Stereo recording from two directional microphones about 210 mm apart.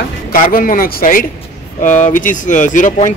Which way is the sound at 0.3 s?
45° left (ahead or behind).